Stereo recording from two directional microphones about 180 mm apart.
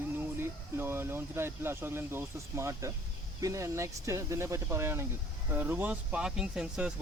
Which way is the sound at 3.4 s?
15° right (ahead or behind).